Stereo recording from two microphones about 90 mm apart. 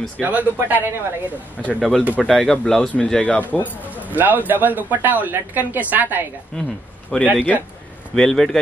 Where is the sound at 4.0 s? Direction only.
20° right (ahead or behind).